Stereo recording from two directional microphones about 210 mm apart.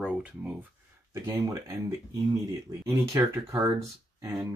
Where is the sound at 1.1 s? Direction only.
15° right (ahead or behind).